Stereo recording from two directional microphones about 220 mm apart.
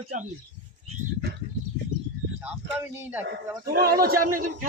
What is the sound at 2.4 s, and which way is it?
Speech, 10° right (ahead or behind).